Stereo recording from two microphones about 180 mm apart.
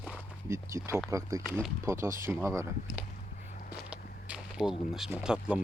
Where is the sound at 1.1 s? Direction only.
15° right (ahead or behind).